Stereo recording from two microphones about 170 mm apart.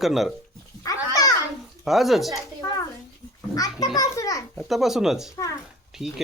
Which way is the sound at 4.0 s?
20° left (ahead or behind).